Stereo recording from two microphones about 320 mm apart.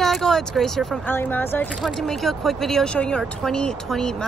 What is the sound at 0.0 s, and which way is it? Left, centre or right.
Speech, centre.